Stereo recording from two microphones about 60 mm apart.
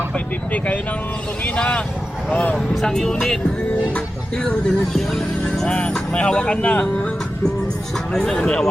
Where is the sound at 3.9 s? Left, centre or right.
Centre.